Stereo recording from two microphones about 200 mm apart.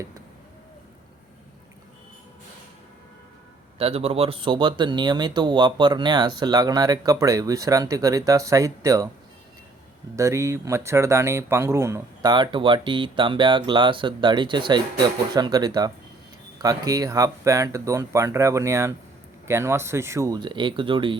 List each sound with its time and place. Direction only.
3.8 s speech: 30° right (ahead or behind)
10.2 s speech: 15° right (ahead or behind)